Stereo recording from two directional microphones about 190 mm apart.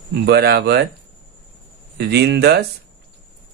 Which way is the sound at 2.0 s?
60° right (ahead or behind).